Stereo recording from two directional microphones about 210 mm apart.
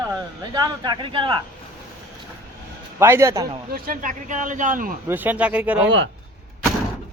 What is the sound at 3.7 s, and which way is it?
Speech, 40° right (ahead or behind).